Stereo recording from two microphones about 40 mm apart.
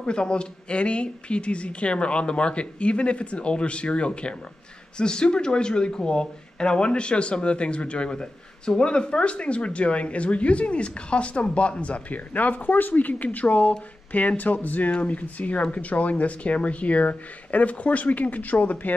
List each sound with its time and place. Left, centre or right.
0.0 s speech: left